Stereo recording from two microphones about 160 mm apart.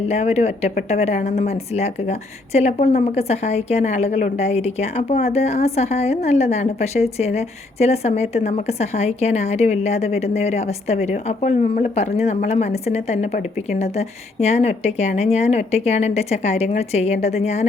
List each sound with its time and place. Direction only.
0.1 s a woman's voice: 40° left (ahead or behind)